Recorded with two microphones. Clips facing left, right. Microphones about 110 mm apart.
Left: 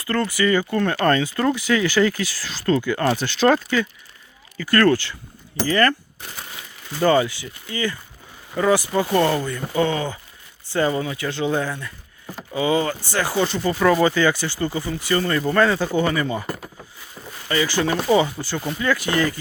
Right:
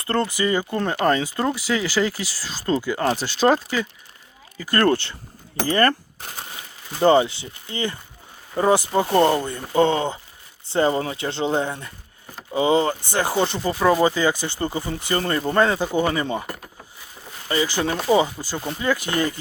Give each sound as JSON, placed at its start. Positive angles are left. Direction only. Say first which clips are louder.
{"t": 0.0, "sound": "speech", "louder": "left 1 dB", "side_deg": -30}
{"t": 5.6, "sound": "speech", "louder": "even", "side_deg": -35}
{"t": 7.0, "sound": "speech", "louder": "right 2 dB", "side_deg": -25}
{"t": 15.1, "sound": "speech", "louder": "left 1 dB", "side_deg": -30}
{"t": 17.5, "sound": "speech", "louder": "left 1 dB", "side_deg": -20}